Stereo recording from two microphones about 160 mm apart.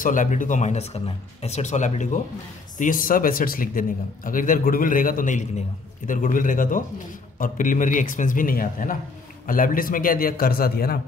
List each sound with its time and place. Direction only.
0.0 s speech: 55° left (ahead or behind)
2.8 s a man's voice: 60° left (ahead or behind)